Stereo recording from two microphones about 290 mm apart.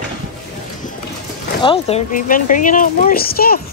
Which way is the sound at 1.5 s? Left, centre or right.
Centre.